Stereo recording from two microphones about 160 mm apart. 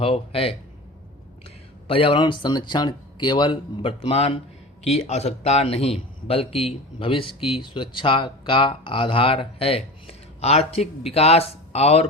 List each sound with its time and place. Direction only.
0.0 s a man's voice: 35° left (ahead or behind)
1.9 s a man's voice: 35° left (ahead or behind)